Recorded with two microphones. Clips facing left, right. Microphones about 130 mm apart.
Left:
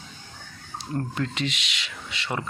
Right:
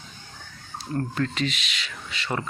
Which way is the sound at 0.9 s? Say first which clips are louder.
Right 2 dB; 20° left (ahead or behind).